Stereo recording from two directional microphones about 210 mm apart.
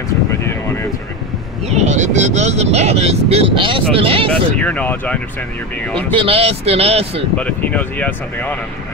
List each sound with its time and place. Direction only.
1.7 s speech: 30° right (ahead or behind)
4.3 s speech: 5° left (ahead or behind)
6.1 s speech: 25° right (ahead or behind)
7.3 s speech: 5° left (ahead or behind)